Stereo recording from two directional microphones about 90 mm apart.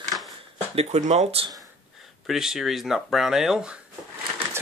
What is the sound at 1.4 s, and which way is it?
Speech, 90° right.